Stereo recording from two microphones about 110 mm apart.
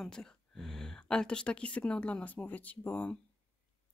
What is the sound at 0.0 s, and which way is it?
Speech, 5° left (ahead or behind).